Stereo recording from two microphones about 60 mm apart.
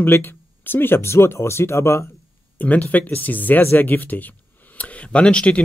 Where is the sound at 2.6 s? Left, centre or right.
Left.